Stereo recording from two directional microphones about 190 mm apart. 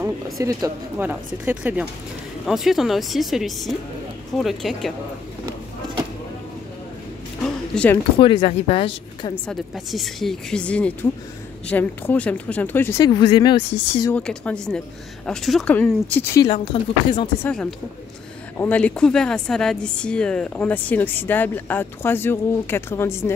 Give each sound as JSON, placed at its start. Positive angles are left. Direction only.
{"t": 0.0, "sound": "speech", "side_deg": -15}
{"t": 7.4, "sound": "a sound", "side_deg": 5}
{"t": 8.2, "sound": "a woman's voice", "side_deg": 30}
{"t": 9.5, "sound": "a woman's voice", "side_deg": 0}
{"t": 14.1, "sound": "a woman's voice", "side_deg": 5}
{"t": 16.7, "sound": "a woman's voice", "side_deg": 30}
{"t": 17.4, "sound": "a woman's voice", "side_deg": 5}